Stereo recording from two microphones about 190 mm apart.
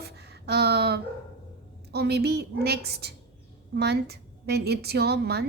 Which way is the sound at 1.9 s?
60° right (ahead or behind).